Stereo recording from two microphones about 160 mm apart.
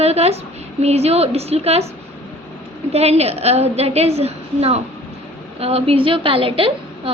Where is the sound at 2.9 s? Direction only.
40° right (ahead or behind).